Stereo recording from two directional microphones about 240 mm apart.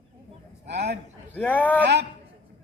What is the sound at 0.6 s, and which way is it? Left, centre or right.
Speech, right.